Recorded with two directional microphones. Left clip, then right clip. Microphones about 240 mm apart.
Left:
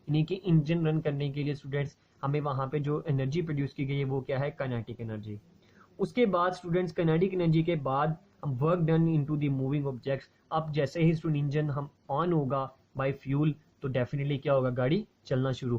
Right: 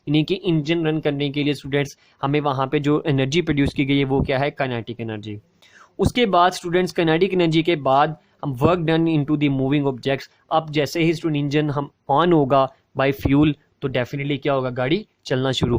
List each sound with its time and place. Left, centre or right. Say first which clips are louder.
0.1 s speech: right 11 dB; right